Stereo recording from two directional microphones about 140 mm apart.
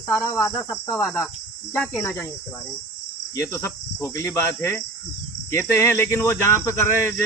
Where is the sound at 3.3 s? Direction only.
20° left (ahead or behind).